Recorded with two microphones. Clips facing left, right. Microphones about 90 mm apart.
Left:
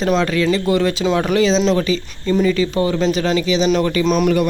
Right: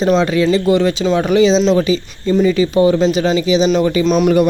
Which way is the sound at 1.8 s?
15° right (ahead or behind).